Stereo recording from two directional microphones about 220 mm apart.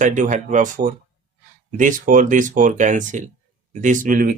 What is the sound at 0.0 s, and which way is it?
Speech, 35° right (ahead or behind).